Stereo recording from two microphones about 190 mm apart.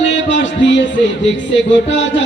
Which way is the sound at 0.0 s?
75° left (ahead or behind).